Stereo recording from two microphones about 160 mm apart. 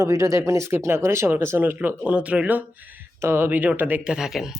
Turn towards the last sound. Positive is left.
turn(degrees=0)  # may be behind; listen again after turning